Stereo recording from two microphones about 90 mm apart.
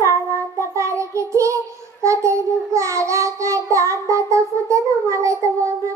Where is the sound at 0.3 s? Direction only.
35° right (ahead or behind).